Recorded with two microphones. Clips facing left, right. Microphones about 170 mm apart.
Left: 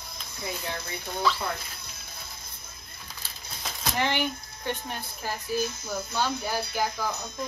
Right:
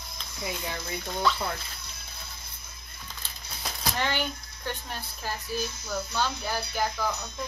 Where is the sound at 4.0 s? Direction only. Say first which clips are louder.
Left 3 dB; 15° left (ahead or behind).